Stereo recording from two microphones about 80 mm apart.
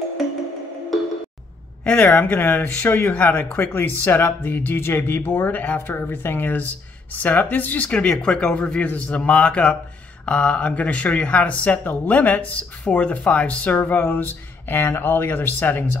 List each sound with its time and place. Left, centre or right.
1.9 s speech: centre